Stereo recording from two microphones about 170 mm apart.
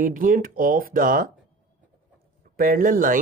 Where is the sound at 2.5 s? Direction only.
55° right (ahead or behind).